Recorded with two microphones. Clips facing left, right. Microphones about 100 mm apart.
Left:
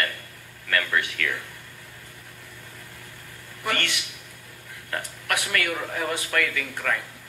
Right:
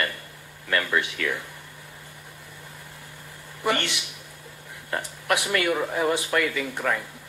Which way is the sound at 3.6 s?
20° right (ahead or behind).